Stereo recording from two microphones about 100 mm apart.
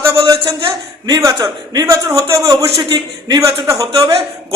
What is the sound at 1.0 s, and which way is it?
Speech, 40° right (ahead or behind).